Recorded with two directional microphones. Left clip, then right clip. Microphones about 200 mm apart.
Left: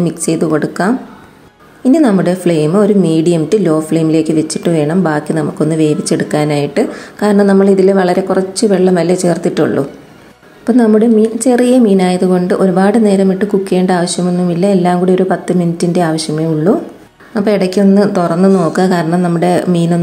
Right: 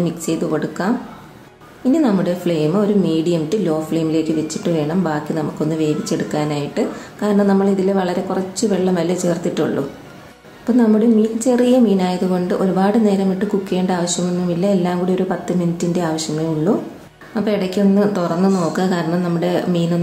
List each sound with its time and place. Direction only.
0.0 s a woman's voice: 35° left (ahead or behind)